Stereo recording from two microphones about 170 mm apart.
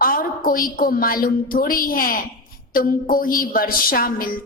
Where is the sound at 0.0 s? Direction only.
55° left (ahead or behind).